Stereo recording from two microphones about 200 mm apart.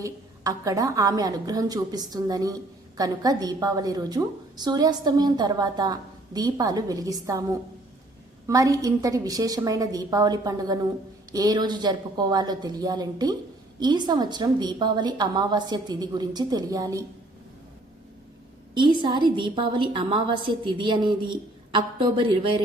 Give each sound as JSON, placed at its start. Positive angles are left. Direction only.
{"t": 0.0, "sound": "a woman's voice", "side_deg": -15}
{"t": 18.7, "sound": "a woman's voice", "side_deg": -25}